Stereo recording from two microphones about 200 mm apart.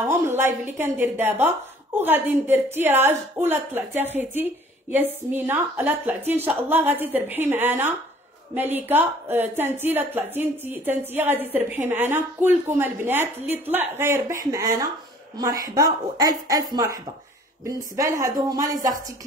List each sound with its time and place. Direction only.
0.0 s a woman's voice: 10° right (ahead or behind)